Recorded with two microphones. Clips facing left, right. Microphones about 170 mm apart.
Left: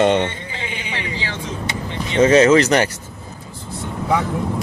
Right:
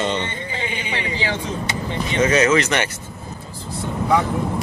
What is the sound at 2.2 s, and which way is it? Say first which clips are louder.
Speech: left 6 dB; 30° left (ahead or behind).